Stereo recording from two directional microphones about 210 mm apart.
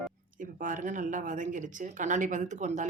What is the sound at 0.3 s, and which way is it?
Speech, 40° right (ahead or behind).